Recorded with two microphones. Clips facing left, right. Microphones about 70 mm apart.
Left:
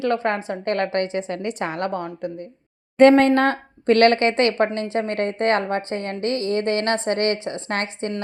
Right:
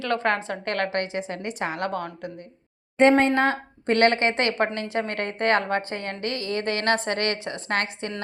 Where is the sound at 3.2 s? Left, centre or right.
Left.